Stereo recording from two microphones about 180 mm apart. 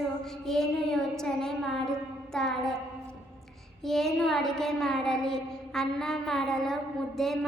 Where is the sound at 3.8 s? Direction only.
Centre (ahead or behind).